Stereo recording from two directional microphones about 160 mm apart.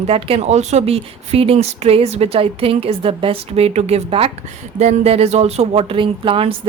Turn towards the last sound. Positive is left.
turn(degrees=-35)  # may be behind; listen again after turning